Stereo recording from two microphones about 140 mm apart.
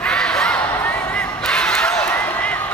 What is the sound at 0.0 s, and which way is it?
Crowd, 5° left (ahead or behind).